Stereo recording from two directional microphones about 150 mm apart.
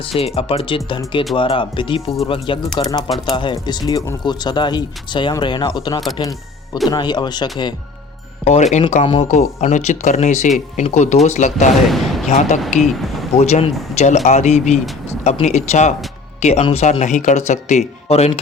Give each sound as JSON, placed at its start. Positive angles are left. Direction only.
{"t": 0.0, "sound": "speech", "side_deg": 40}
{"t": 2.7, "sound": "speech", "side_deg": 25}
{"t": 8.4, "sound": "speech", "side_deg": 50}
{"t": 9.2, "sound": "speech", "side_deg": 55}
{"t": 11.9, "sound": "speech", "side_deg": 0}
{"t": 12.3, "sound": "speech", "side_deg": 50}
{"t": 12.8, "sound": "speech", "side_deg": 0}
{"t": 13.3, "sound": "speech", "side_deg": 45}